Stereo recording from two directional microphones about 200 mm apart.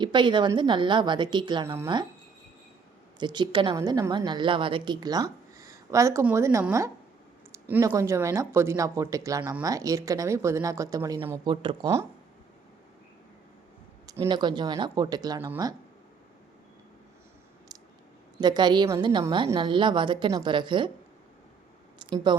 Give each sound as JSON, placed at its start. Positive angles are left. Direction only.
{"t": 0.0, "sound": "a woman's voice", "side_deg": -25}
{"t": 3.2, "sound": "a woman's voice", "side_deg": -20}
{"t": 14.1, "sound": "a woman's voice", "side_deg": -20}
{"t": 18.3, "sound": "a woman's voice", "side_deg": -20}
{"t": 21.9, "sound": "a sound", "side_deg": -25}